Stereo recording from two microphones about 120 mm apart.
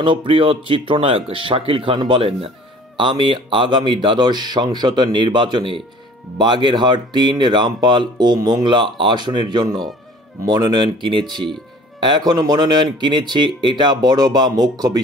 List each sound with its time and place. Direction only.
0.0 s speech: 45° right (ahead or behind)
8.6 s speech: 45° right (ahead or behind)